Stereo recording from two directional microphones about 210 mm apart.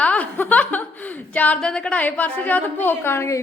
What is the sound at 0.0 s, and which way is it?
A woman's voice, 5° left (ahead or behind).